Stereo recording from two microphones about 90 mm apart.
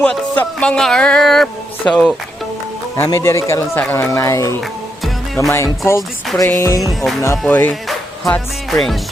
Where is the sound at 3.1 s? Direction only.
30° left (ahead or behind).